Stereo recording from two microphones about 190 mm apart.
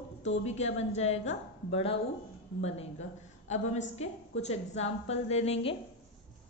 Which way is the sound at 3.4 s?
40° left (ahead or behind).